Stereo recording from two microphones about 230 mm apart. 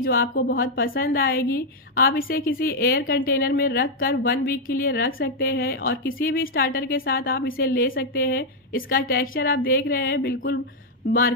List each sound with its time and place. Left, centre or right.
0.0 s a woman's voice: left